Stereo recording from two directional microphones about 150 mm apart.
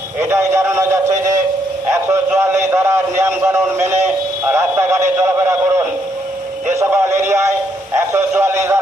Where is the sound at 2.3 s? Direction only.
20° right (ahead or behind).